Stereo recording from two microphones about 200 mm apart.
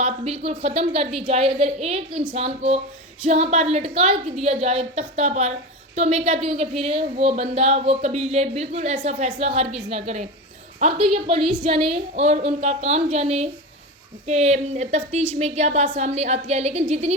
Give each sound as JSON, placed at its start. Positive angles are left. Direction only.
{"t": 0.0, "sound": "speech", "side_deg": -30}